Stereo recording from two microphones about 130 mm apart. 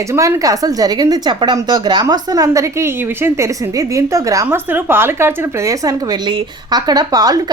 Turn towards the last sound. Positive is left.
turn(degrees=-30)  # may be behind; listen again after turning